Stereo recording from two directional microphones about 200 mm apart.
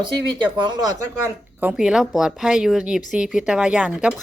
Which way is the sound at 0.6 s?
15° right (ahead or behind).